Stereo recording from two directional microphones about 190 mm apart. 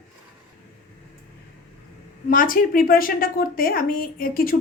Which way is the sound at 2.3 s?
45° left (ahead or behind).